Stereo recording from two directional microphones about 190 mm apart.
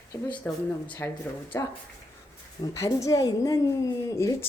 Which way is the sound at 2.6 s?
15° left (ahead or behind).